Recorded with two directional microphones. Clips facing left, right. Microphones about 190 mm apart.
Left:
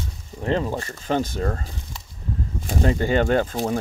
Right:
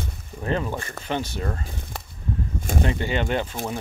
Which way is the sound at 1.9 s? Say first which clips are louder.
Right 5 dB; 55° right (ahead or behind).